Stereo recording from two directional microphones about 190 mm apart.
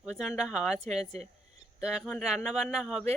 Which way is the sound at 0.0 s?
5° right (ahead or behind).